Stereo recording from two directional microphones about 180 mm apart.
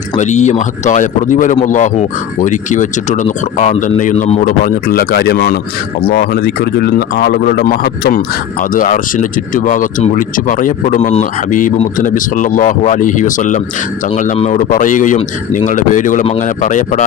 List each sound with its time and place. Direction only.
0.2 s a man's voice: 40° left (ahead or behind)